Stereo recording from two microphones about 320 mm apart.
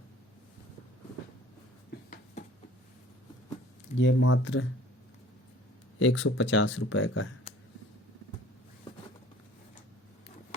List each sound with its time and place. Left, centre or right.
3.9 s speech: left
6.0 s speech: left